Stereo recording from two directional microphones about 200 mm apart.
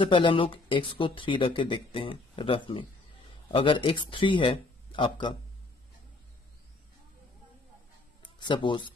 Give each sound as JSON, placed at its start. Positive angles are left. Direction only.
{"t": 0.1, "sound": "speech", "side_deg": 25}
{"t": 8.2, "sound": "speech", "side_deg": 20}